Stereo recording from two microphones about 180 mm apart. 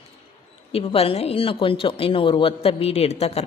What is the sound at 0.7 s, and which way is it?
A woman's voice, 30° left (ahead or behind).